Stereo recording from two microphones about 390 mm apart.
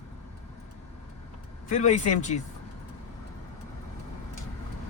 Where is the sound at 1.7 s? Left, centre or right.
Centre.